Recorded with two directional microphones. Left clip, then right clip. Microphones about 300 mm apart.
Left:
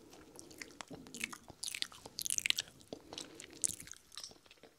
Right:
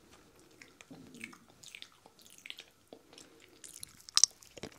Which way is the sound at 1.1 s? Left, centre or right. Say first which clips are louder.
Left 6 dB; left.